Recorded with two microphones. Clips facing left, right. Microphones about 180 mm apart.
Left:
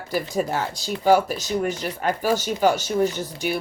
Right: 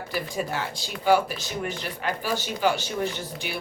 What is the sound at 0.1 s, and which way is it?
Speech, 40° left (ahead or behind).